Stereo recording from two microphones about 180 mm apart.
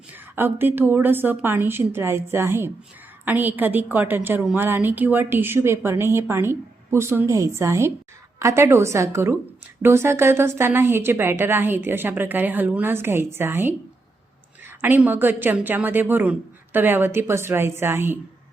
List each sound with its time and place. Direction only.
0.1 s a woman's voice: 10° right (ahead or behind)
14.8 s a woman's voice: 10° right (ahead or behind)